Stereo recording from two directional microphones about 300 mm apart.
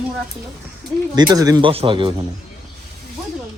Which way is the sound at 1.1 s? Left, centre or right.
Centre.